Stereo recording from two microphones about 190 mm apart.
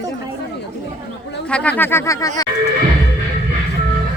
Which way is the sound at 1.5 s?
5° left (ahead or behind).